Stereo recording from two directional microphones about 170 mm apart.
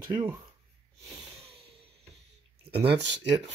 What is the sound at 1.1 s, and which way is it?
Snort, 35° right (ahead or behind).